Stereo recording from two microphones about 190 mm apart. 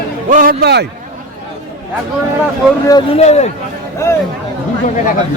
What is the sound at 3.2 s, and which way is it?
Speech, 35° left (ahead or behind).